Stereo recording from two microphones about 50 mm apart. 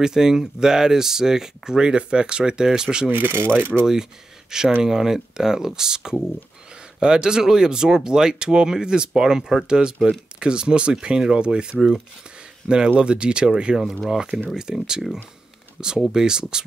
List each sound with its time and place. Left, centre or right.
0.0 s speech: centre
3.1 s speech: right
3.8 s speech: centre
14.0 s speech: centre
16.1 s speech: centre